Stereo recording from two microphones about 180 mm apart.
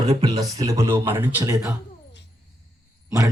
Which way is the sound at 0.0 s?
20° right (ahead or behind).